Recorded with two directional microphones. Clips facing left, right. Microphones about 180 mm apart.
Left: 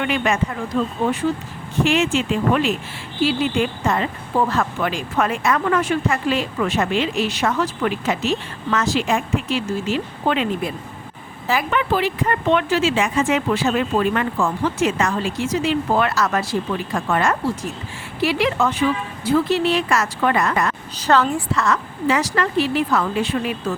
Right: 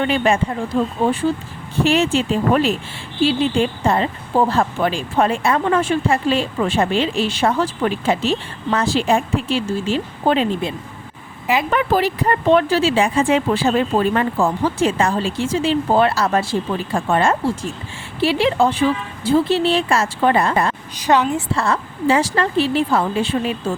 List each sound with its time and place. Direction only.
0.0 s speech: 30° right (ahead or behind)
11.7 s a woman's voice: 40° right (ahead or behind)
21.0 s a woman's voice: 15° right (ahead or behind)
21.5 s a woman's voice: 30° right (ahead or behind)